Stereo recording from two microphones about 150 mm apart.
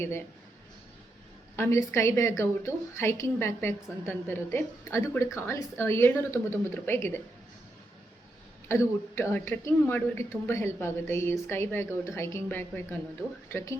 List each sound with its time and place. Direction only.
0.0 s a woman's voice: 15° left (ahead or behind)
1.5 s a woman's voice: 20° left (ahead or behind)
8.6 s a woman's voice: 15° left (ahead or behind)